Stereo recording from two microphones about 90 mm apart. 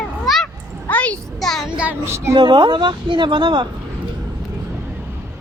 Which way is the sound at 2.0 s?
30° right (ahead or behind).